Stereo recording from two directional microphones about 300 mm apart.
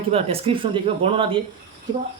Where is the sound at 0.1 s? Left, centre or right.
Centre.